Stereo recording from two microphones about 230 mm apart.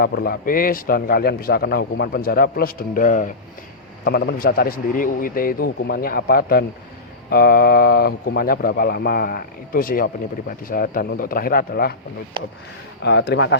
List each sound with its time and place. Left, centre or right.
0.0 s a man's voice: left
12.4 s speech: right
13.0 s speech: left